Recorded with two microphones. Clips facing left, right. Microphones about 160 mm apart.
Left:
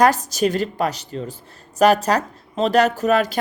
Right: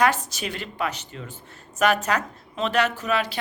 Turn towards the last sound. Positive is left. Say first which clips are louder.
# left 7 dB
turn(degrees=45)  # may be behind; listen again after turning